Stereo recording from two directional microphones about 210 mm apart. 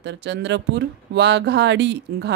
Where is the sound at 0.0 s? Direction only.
55° right (ahead or behind).